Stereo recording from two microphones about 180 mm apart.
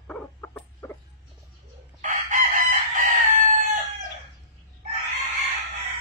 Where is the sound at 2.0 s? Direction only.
45° right (ahead or behind).